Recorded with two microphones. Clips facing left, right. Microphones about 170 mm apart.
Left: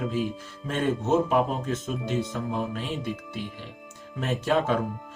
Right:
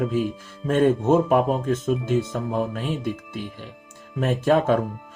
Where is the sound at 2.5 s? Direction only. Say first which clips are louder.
Right 6 dB; 50° right (ahead or behind).